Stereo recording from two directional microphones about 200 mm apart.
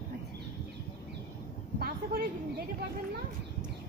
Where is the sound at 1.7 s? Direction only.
50° right (ahead or behind).